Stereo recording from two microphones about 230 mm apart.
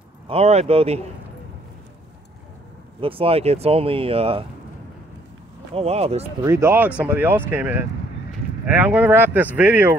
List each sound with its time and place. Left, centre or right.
0.3 s speech: right
3.0 s speech: right
5.8 s speech: right
6.4 s speech: centre